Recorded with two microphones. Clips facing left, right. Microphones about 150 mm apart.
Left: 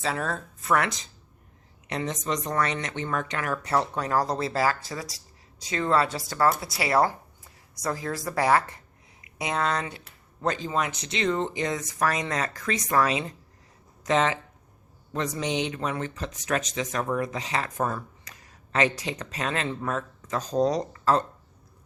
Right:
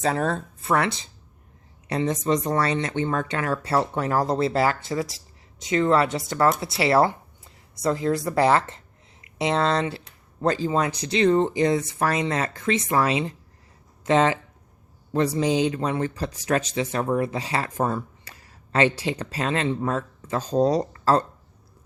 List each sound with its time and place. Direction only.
0.0 s speech: 35° right (ahead or behind)